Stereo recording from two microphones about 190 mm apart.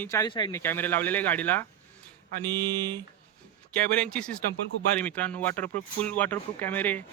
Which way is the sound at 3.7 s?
5° left (ahead or behind).